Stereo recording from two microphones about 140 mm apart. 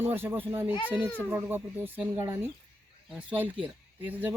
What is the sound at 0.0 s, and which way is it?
Speech, 15° right (ahead or behind).